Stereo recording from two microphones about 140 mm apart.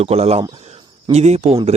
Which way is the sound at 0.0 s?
45° right (ahead or behind).